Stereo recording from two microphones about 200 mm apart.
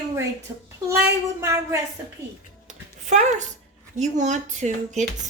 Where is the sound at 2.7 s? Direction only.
35° right (ahead or behind).